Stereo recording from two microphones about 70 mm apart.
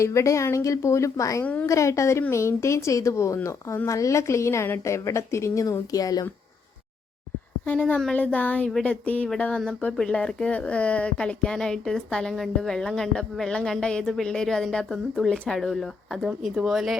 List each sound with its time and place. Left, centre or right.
0.0 s a woman's voice: left
7.6 s speech: left; by 17.0 s centre